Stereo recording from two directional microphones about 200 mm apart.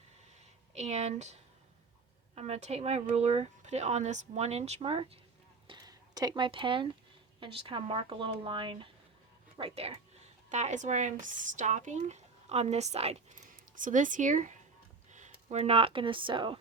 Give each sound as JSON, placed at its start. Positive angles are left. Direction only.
{"t": 0.7, "sound": "a woman's voice", "side_deg": -35}